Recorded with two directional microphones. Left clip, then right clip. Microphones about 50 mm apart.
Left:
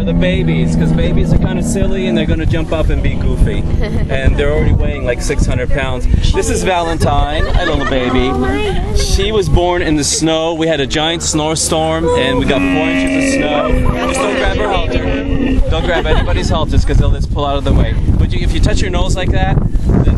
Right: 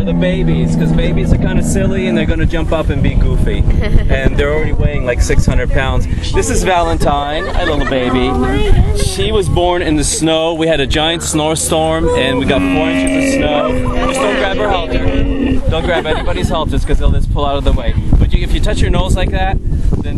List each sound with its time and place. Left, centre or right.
0.0 s speech: right
4.1 s speech: right
7.9 s speech: centre
8.4 s speech: right
9.2 s speech: centre
10.4 s speech: centre
12.8 s speech: right
13.6 s speech: centre
14.1 s speech: right
17.4 s speech: centre